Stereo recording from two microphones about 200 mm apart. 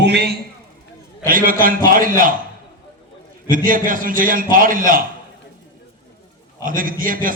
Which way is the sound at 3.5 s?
45° right (ahead or behind).